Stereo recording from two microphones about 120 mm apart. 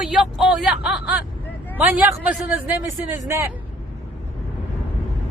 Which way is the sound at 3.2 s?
25° right (ahead or behind).